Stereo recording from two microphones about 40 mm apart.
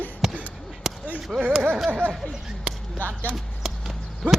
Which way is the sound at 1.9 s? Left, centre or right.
Right.